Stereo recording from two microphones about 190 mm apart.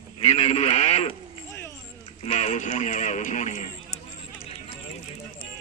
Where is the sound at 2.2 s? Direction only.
35° left (ahead or behind).